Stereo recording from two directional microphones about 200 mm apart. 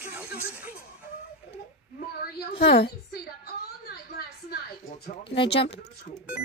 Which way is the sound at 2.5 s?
55° left (ahead or behind).